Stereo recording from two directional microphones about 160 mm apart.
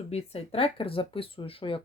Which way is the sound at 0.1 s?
40° left (ahead or behind).